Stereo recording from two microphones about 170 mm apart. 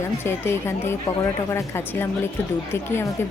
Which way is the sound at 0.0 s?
15° left (ahead or behind).